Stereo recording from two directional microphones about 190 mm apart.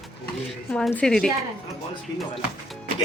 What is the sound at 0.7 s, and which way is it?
Speech, 5° left (ahead or behind).